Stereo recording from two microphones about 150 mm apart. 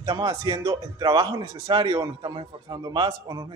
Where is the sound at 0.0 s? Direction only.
25° right (ahead or behind).